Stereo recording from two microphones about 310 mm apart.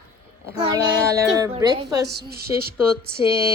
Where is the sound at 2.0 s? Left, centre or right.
Right.